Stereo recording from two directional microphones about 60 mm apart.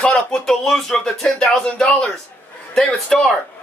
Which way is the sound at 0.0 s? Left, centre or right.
Centre.